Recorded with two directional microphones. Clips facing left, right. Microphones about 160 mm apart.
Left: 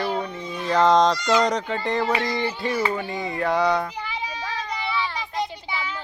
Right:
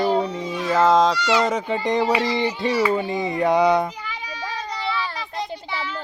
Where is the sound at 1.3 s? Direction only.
5° right (ahead or behind).